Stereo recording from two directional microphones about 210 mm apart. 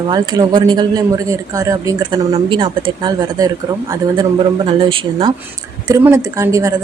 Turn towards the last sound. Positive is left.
turn(degrees=-15)  # may be behind; listen again after turning